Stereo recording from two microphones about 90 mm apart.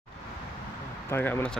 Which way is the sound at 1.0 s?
25° left (ahead or behind).